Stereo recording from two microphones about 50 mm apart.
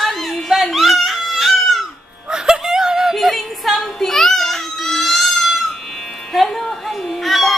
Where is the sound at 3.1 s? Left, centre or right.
Centre.